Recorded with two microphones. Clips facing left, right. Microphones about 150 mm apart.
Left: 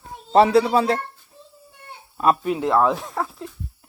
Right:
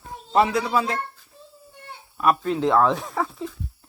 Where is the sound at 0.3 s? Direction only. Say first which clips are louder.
Left 5 dB; 35° left (ahead or behind).